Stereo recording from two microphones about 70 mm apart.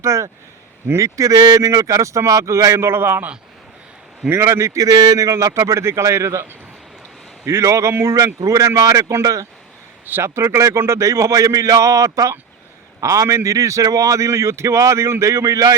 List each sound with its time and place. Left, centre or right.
0.0 s speech: right
2.8 s a man's voice: right
4.3 s speech: right
7.4 s speech: right
10.1 s speech: right